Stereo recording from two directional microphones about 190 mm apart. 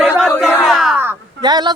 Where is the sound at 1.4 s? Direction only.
20° right (ahead or behind).